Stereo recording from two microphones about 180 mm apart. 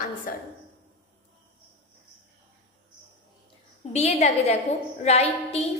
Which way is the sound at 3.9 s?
40° left (ahead or behind).